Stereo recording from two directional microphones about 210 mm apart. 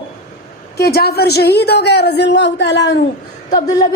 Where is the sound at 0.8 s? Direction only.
50° left (ahead or behind).